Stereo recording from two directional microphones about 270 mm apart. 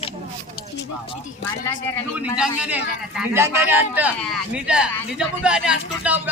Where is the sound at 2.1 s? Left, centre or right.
Centre.